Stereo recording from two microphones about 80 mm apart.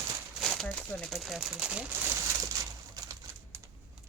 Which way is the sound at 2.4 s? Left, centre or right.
Right.